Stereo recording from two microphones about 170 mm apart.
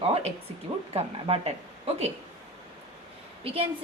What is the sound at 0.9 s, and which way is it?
Speech, 35° right (ahead or behind).